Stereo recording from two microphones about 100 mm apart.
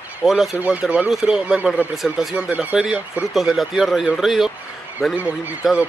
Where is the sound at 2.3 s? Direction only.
15° right (ahead or behind).